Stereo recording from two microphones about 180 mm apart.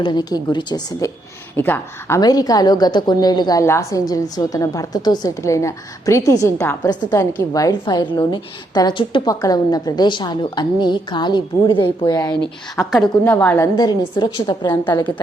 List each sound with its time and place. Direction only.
0.0 s a woman's voice: 25° left (ahead or behind)
1.5 s a woman's voice: 10° left (ahead or behind)
12.7 s a woman's voice: centre (ahead or behind)
13.7 s a woman's voice: 25° left (ahead or behind)